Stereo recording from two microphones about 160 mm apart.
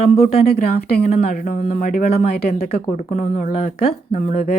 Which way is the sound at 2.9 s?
50° left (ahead or behind).